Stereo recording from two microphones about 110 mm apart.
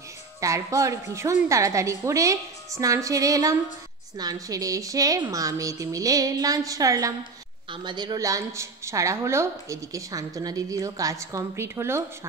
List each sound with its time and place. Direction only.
0.4 s a woman's voice: 30° right (ahead or behind)
7.7 s a woman's voice: 45° right (ahead or behind); by 12.0 s 25° right (ahead or behind)